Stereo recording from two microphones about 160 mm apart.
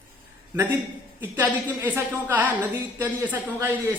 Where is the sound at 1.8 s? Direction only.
10° right (ahead or behind).